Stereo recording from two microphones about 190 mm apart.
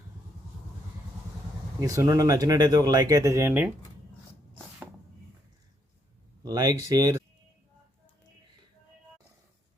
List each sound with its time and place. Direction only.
1.8 s speech: 20° right (ahead or behind)
6.4 s speech: 20° right (ahead or behind)